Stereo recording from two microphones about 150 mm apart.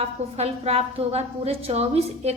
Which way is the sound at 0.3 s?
45° right (ahead or behind).